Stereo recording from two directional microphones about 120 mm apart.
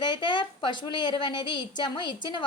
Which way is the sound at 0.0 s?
40° left (ahead or behind).